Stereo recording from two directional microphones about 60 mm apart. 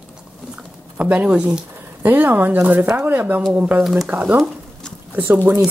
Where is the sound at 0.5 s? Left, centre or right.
Right.